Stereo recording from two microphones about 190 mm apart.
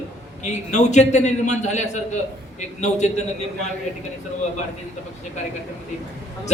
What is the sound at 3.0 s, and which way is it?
Speech, 40° left (ahead or behind).